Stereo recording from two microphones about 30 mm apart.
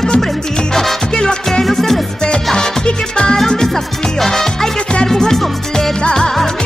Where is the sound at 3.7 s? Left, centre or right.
Centre.